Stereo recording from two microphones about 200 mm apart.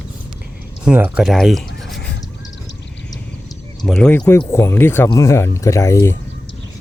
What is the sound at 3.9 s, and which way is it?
Speech, 5° left (ahead or behind).